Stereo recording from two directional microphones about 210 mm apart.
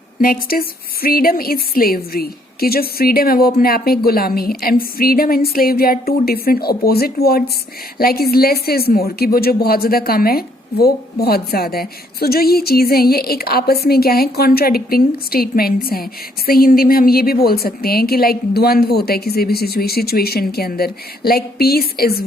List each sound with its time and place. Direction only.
0.2 s speech: 45° left (ahead or behind)